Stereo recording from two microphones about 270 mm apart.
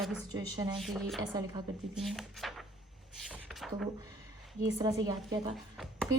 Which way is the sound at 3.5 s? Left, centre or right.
Centre.